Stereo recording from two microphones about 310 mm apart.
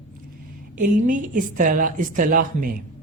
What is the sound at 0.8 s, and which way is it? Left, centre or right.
Speech, right.